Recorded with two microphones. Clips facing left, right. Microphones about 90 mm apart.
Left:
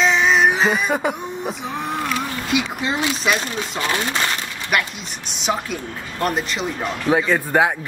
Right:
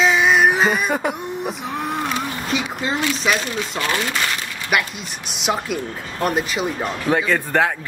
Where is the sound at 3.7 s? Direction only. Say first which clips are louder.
Left 1 dB; 20° left (ahead or behind).